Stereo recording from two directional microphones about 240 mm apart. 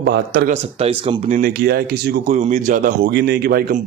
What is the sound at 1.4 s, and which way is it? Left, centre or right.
Speech, right.